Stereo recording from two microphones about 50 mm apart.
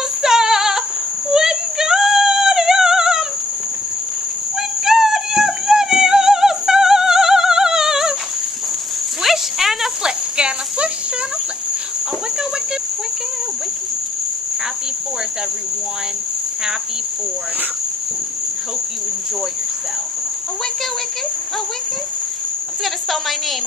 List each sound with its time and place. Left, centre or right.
0.2 s music: centre
4.8 s music: centre
9.2 s cricket: centre
10.0 s insect: centre